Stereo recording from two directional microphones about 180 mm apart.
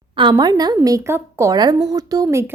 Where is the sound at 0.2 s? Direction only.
25° right (ahead or behind).